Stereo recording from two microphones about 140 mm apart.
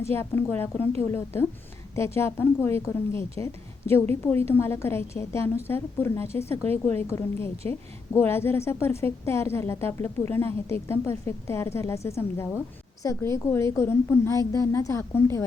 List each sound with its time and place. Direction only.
0.0 s a woman's voice: 15° left (ahead or behind)